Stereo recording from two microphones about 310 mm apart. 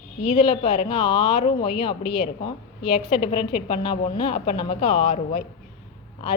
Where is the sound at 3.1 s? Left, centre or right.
Centre.